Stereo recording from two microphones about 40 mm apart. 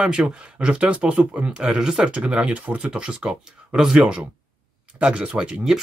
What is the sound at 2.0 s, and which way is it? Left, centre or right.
Speech, right.